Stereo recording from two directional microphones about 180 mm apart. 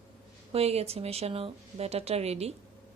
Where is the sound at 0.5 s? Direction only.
35° right (ahead or behind).